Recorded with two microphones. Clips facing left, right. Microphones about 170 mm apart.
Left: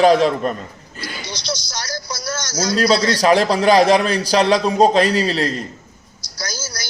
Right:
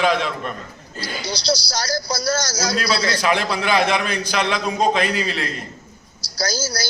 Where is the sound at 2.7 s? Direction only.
40° left (ahead or behind).